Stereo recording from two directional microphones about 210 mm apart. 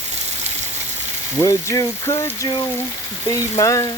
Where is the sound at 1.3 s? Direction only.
15° left (ahead or behind).